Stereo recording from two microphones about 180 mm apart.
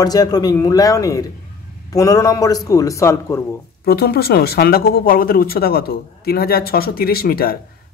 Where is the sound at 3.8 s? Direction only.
60° left (ahead or behind).